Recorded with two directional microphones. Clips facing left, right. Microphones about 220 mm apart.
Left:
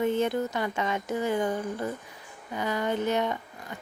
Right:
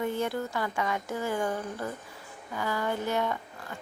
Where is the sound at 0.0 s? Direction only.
20° left (ahead or behind).